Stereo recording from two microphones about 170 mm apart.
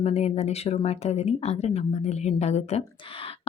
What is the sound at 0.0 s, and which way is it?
Speech, 40° left (ahead or behind).